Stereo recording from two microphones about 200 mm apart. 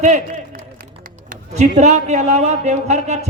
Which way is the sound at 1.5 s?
35° right (ahead or behind).